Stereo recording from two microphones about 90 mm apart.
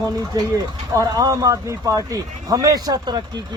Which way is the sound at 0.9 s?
40° right (ahead or behind).